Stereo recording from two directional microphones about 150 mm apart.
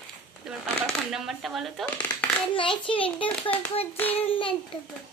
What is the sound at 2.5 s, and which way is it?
A child's voice, 35° left (ahead or behind).